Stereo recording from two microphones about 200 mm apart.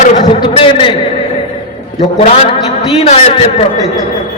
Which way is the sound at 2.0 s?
30° left (ahead or behind).